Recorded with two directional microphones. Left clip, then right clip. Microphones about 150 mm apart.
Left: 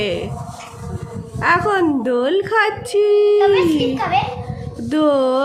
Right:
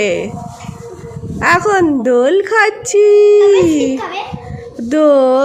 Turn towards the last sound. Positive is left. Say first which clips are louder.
# right 6 dB
turn(degrees=-40)  # may be behind; listen again after turning